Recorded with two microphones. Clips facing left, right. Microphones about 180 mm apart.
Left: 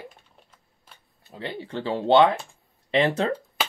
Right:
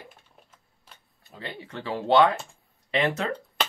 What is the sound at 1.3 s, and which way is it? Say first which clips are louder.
Speech: left 5 dB; 30° left (ahead or behind).